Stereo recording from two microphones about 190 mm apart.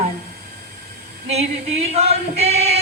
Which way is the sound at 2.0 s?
35° right (ahead or behind).